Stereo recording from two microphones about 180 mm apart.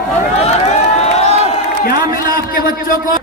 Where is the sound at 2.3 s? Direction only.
50° left (ahead or behind).